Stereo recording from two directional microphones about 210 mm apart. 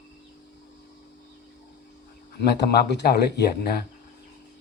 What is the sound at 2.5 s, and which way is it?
Speech, 55° left (ahead or behind).